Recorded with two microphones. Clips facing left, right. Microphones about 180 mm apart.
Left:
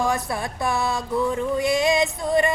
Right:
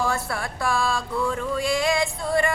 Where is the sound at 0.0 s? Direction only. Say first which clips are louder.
Left 2 dB; 20° left (ahead or behind).